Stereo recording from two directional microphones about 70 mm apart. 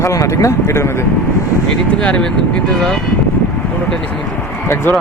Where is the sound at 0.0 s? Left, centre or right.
Left.